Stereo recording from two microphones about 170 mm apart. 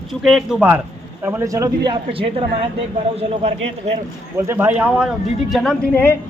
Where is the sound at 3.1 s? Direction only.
35° right (ahead or behind).